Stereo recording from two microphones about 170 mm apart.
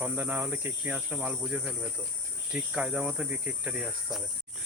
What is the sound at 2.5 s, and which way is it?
Cricket, 5° right (ahead or behind).